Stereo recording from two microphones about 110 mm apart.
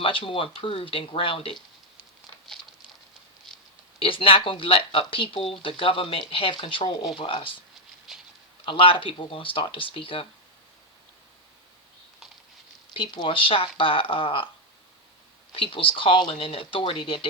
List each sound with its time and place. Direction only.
0.0 s speech: 55° left (ahead or behind)
4.0 s speech: 55° left (ahead or behind)
8.1 s a sound: centre (ahead or behind)
8.6 s speech: 55° left (ahead or behind)
12.9 s speech: 50° left (ahead or behind)
15.5 s speech: 55° left (ahead or behind)